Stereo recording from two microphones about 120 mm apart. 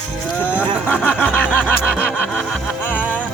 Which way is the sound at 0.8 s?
15° left (ahead or behind).